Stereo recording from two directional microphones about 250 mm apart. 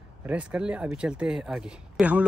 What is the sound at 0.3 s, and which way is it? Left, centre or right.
Speech, centre.